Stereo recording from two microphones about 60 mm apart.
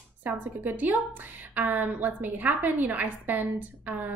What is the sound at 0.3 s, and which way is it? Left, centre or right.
A woman's voice, right.